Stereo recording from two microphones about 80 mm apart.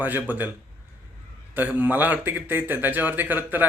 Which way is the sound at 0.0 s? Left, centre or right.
Right.